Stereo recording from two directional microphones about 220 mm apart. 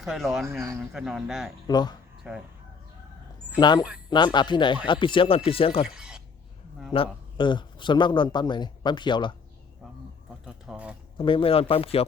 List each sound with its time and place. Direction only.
0.0 s speech: centre (ahead or behind)
1.6 s speech: 20° left (ahead or behind)
2.3 s speech: 5° right (ahead or behind)
3.6 s speech: 20° left (ahead or behind)
5.9 s a sound: 5° right (ahead or behind)
6.9 s speech: 25° left (ahead or behind)
10.4 s speech: 5° right (ahead or behind)
11.2 s speech: 25° left (ahead or behind)